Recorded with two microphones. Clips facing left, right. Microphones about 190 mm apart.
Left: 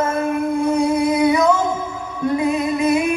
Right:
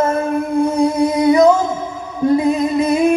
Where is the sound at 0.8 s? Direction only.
35° right (ahead or behind).